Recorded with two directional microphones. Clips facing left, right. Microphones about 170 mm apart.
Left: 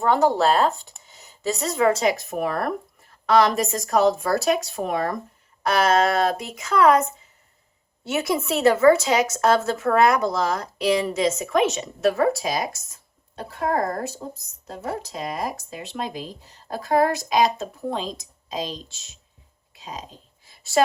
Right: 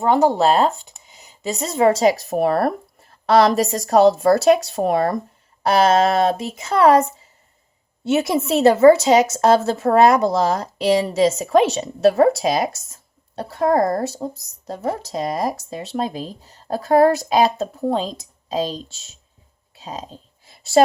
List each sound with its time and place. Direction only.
0.0 s speech: 20° right (ahead or behind); by 18.8 s 35° right (ahead or behind)
19.8 s dog: 30° right (ahead or behind)